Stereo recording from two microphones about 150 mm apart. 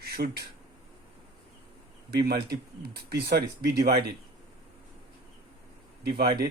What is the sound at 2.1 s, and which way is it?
A man's voice, 90° right.